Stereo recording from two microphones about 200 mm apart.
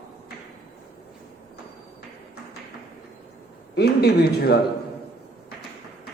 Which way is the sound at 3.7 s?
55° left (ahead or behind).